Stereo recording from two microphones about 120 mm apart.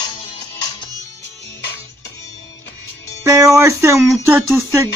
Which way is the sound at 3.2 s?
25° right (ahead or behind).